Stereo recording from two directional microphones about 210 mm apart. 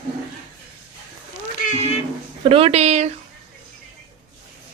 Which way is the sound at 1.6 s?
40° left (ahead or behind).